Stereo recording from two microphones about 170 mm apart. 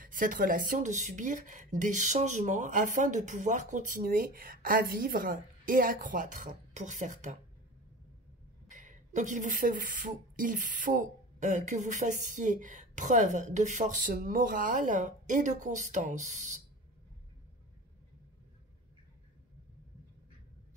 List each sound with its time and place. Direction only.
0.0 s speech: 55° right (ahead or behind)
8.6 s speech: 50° right (ahead or behind)